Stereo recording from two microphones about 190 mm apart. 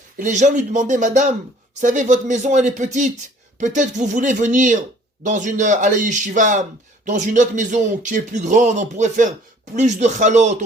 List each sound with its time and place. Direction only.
0.2 s speech: 40° right (ahead or behind)